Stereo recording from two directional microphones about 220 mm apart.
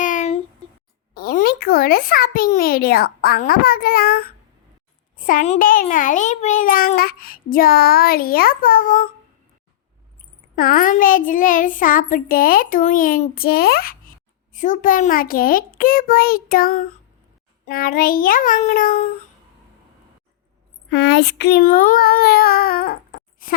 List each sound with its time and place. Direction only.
0.0 s a sound: 35° left (ahead or behind)
1.1 s a child's voice: 40° left (ahead or behind)
10.5 s a child's voice: 40° left (ahead or behind)
20.9 s a child's voice: 50° left (ahead or behind)